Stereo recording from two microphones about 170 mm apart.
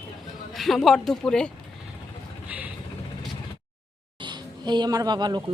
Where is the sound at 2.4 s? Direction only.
10° right (ahead or behind).